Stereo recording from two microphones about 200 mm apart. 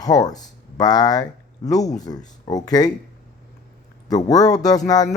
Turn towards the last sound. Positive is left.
turn(degrees=20)  # may be behind; listen again after turning